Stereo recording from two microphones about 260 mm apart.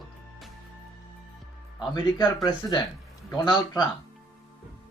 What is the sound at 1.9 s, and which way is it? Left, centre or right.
Speech, centre.